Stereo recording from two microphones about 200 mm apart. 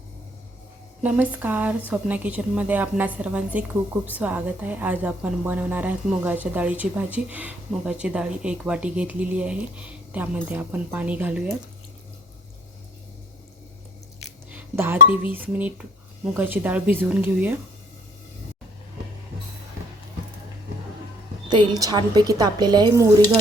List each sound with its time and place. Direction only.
1.0 s a woman's voice: 5° right (ahead or behind)
14.5 s a woman's voice: 10° right (ahead or behind)
21.5 s speech: 20° right (ahead or behind)